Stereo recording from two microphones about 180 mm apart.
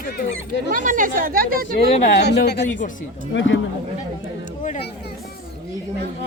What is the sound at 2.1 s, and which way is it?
Speech, 70° left (ahead or behind).